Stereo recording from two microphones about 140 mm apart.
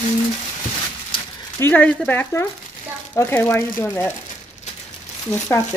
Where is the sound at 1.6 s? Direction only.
15° left (ahead or behind).